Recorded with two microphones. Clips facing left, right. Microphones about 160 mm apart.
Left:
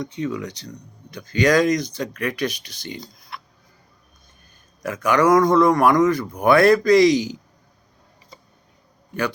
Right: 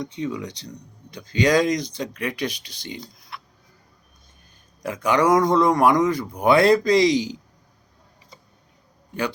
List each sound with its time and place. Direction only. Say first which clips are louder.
0.0 s speech: left 2 dB; 20° right (ahead or behind)
4.8 s speech: left 2 dB; 25° right (ahead or behind)